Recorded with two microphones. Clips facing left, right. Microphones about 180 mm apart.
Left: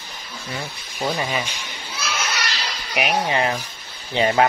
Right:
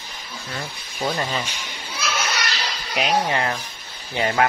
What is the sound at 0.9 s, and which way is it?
Speech, centre (ahead or behind).